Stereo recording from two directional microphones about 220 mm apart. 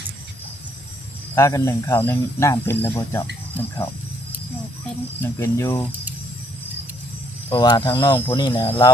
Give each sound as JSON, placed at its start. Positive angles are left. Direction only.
{"t": 1.4, "sound": "speech", "side_deg": 15}
{"t": 5.2, "sound": "speech", "side_deg": 15}
{"t": 7.5, "sound": "speech", "side_deg": 20}